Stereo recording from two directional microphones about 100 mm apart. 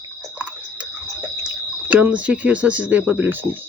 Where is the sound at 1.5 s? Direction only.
15° right (ahead or behind).